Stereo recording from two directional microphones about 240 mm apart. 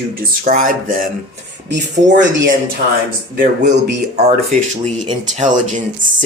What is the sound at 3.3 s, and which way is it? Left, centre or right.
Speech, right.